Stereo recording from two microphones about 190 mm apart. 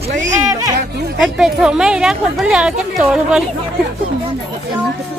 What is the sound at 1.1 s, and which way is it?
Speech, centre (ahead or behind).